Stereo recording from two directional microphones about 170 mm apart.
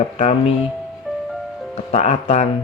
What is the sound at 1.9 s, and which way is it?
Speech, 40° left (ahead or behind).